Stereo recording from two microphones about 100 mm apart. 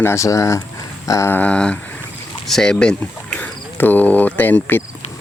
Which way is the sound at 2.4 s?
5° left (ahead or behind).